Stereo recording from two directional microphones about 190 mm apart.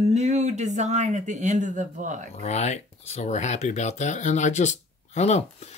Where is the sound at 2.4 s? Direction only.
35° left (ahead or behind).